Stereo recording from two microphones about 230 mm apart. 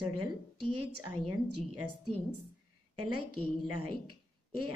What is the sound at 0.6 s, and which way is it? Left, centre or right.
Speech, right.